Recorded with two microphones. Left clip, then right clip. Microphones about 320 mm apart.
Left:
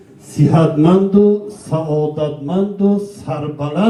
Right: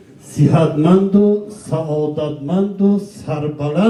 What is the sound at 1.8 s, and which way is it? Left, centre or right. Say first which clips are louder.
Mantra: left 2 dB; centre.